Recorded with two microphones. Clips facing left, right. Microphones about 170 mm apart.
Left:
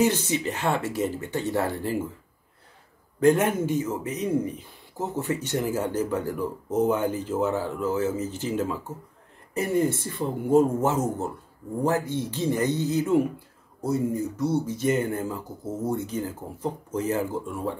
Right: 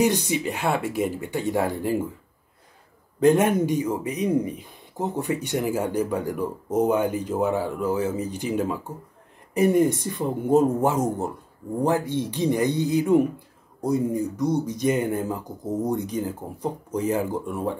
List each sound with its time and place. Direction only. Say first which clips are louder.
0.0 s speech: right 1 dB; 15° right (ahead or behind)
3.2 s speech: right 2 dB; 15° right (ahead or behind)